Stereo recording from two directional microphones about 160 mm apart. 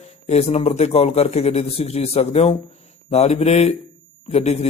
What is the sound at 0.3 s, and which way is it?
A man's voice, 40° left (ahead or behind).